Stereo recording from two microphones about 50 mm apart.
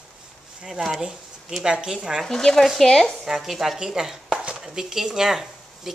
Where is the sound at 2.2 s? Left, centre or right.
Centre.